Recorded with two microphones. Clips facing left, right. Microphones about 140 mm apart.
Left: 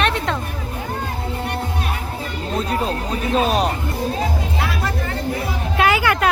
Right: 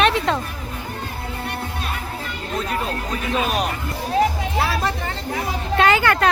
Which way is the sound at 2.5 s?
30° left (ahead or behind).